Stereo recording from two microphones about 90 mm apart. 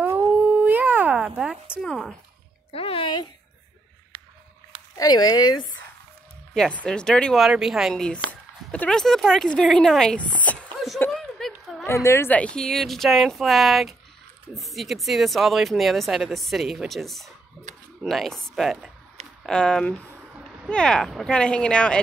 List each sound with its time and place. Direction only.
0.3 s a sound: 20° right (ahead or behind)
1.8 s speech: 5° left (ahead or behind)
2.7 s speech: 90° left
4.9 s speech: 45° left (ahead or behind)
6.5 s speech: 10° left (ahead or behind)
7.3 s speech: 5° right (ahead or behind)
7.9 s speech: 10° left (ahead or behind)
8.9 s speech: 5° left (ahead or behind)
10.4 s speech: 15° left (ahead or behind)
11.1 s a sound: 5° left (ahead or behind)
11.8 s a woman's voice: 30° left (ahead or behind)
12.3 s speech: 15° left (ahead or behind)